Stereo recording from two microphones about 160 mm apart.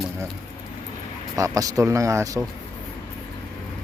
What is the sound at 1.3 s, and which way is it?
Speech, 20° right (ahead or behind).